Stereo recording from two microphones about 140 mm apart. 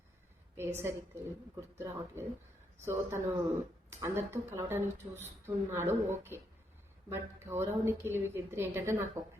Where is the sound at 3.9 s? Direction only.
20° right (ahead or behind).